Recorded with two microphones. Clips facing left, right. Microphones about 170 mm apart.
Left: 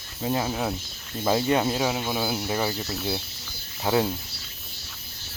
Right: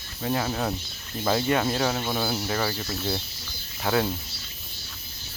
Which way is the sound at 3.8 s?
20° left (ahead or behind).